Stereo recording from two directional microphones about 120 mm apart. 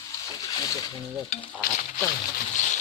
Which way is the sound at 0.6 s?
30° left (ahead or behind).